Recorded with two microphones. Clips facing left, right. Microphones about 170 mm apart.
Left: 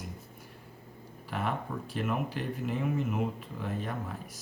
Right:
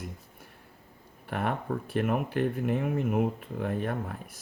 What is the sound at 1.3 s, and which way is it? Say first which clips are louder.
Speech: right 3 dB; 60° right (ahead or behind).